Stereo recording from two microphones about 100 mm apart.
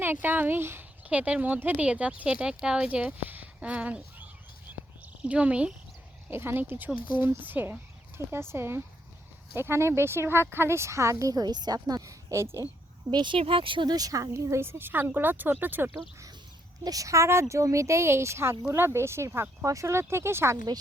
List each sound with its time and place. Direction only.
0.0 s speech: 20° right (ahead or behind)
4.7 s a sound: 20° right (ahead or behind)
5.2 s speech: 10° right (ahead or behind)
6.3 s speech: 20° right (ahead or behind)
13.1 s speech: 50° right (ahead or behind)
13.9 s speech: 35° right (ahead or behind); by 16.0 s 20° right (ahead or behind)
16.8 s a woman's voice: 35° right (ahead or behind)